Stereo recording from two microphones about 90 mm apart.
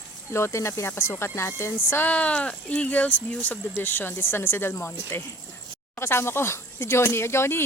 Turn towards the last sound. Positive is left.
turn(degrees=30)  # may be behind; listen again after turning